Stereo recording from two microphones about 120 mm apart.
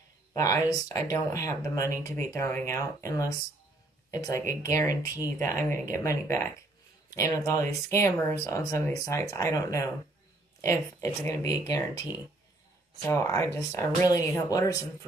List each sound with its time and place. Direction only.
0.3 s speech: 30° left (ahead or behind)
13.1 s speech: 25° left (ahead or behind)